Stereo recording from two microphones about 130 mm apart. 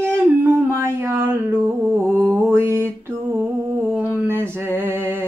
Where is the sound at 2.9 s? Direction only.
20° right (ahead or behind).